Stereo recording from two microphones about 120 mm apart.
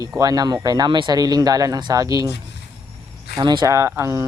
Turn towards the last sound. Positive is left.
turn(degrees=-25)  # may be behind; listen again after turning